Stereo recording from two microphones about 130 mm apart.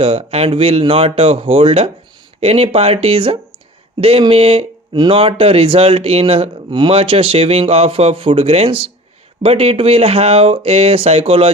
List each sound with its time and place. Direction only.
0.0 s speech: 50° right (ahead or behind)